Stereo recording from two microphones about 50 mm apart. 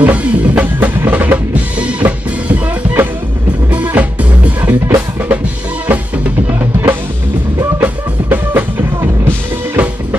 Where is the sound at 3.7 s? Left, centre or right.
Right.